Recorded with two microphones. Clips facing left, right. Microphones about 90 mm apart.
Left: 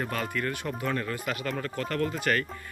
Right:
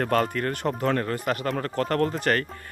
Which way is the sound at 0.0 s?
50° right (ahead or behind).